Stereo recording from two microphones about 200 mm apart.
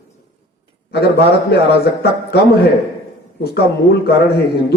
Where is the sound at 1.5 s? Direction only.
50° left (ahead or behind).